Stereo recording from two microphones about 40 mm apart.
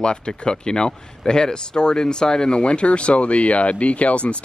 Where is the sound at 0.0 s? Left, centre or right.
Centre.